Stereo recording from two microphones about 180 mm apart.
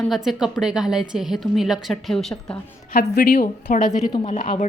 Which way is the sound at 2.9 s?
55° left (ahead or behind).